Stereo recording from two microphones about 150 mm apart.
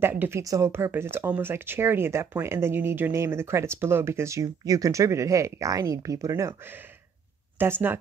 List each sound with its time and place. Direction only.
0.0 s speech: 15° right (ahead or behind)